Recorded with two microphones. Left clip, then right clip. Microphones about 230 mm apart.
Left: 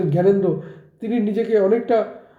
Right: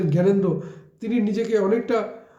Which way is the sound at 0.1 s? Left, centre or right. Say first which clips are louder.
Left 4 dB; centre.